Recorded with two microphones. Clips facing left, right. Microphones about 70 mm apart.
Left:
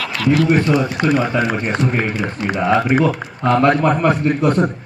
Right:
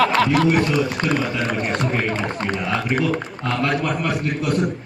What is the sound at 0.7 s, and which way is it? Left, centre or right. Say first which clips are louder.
Speech: left 4 dB; centre.